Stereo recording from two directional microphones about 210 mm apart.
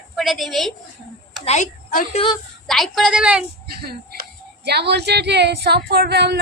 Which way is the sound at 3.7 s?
50° right (ahead or behind).